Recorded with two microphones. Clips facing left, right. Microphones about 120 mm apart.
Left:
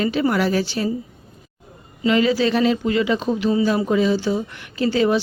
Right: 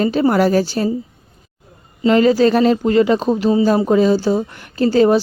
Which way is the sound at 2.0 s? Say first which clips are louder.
Right 5 dB; 40° right (ahead or behind).